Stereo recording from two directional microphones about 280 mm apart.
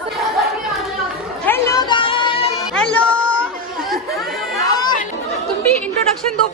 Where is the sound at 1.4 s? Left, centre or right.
Centre.